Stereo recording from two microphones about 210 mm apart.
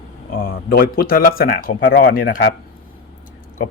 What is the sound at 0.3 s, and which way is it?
Speech, 45° left (ahead or behind).